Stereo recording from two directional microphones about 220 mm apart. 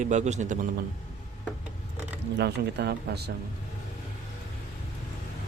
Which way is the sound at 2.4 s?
50° right (ahead or behind).